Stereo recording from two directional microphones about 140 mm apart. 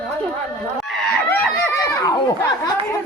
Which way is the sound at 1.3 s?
15° left (ahead or behind).